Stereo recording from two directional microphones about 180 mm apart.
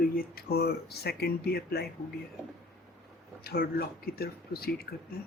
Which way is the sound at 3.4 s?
55° left (ahead or behind).